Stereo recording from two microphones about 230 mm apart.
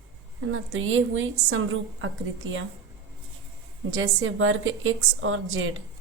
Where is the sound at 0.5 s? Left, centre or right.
Right.